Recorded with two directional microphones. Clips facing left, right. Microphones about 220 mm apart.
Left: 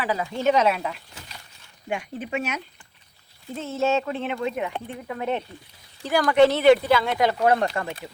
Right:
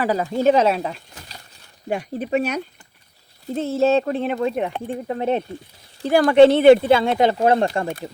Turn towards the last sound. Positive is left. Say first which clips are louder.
# right 4 dB
turn(degrees=-25)  # may be behind; listen again after turning